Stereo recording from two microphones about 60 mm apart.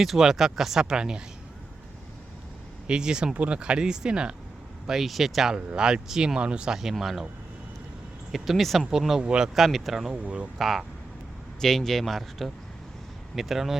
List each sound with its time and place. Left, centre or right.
0.0 s speech: centre
2.8 s speech: centre
4.9 s speech: centre
6.7 s speech: centre
8.3 s speech: centre
9.6 s speech: centre
10.1 s speech: centre
10.6 s speech: centre